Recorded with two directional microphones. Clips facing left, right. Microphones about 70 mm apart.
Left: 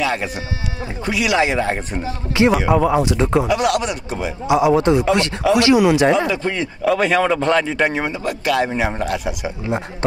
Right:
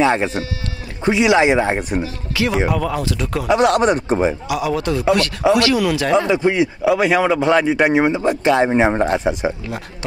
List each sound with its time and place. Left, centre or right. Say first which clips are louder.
0.0 s a man's voice: right 5 dB; right
2.0 s speech: left 5 dB; left
3.4 s speech: right 4 dB; right
4.5 s speech: left 6 dB; left
6.1 s a man's voice: right 4 dB; right